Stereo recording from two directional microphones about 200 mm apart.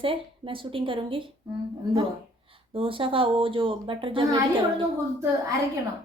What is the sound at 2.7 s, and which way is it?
Speech, 25° right (ahead or behind).